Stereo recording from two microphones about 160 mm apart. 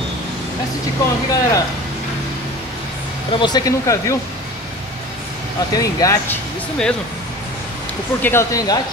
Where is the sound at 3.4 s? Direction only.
25° left (ahead or behind).